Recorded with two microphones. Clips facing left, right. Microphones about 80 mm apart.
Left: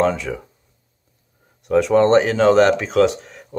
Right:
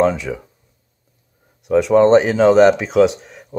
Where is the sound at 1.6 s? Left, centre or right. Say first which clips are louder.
Right 2 dB; centre.